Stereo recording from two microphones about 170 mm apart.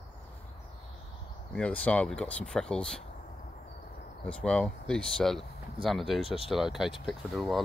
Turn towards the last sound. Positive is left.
turn(degrees=0)  # may be behind; listen again after turning